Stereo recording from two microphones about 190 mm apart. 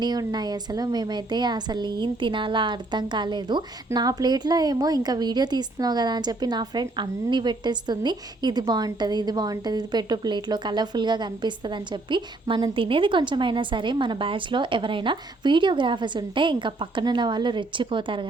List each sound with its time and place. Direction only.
0.0 s a woman's voice: 20° right (ahead or behind)